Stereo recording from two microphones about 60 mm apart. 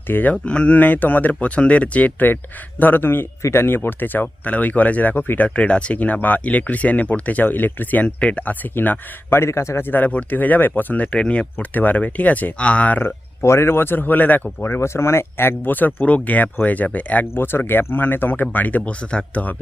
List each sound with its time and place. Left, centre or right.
0.1 s speech: left
0.4 s speech: centre
8.0 s speech: centre
8.7 s speech: left
9.4 s a man's voice: left
9.8 s speech: left
11.5 s speech: left
13.0 s speech: left
17.3 s speech: left